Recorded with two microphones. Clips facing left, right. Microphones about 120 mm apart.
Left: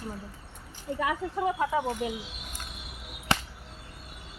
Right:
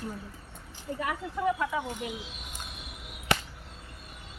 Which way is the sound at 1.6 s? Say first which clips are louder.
Left 4 dB; 30° left (ahead or behind).